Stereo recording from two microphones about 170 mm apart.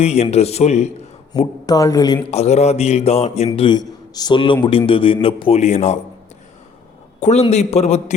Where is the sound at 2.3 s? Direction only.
40° left (ahead or behind).